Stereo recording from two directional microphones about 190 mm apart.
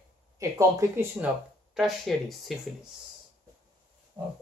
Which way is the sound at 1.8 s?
Centre (ahead or behind).